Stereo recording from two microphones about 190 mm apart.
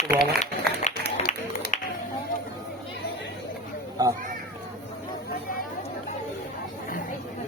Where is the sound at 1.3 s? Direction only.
40° left (ahead or behind).